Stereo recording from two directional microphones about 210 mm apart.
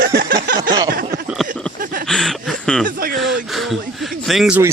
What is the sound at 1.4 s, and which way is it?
Speech, centre (ahead or behind).